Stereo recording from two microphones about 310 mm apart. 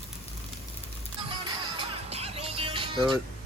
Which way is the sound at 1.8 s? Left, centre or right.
Centre.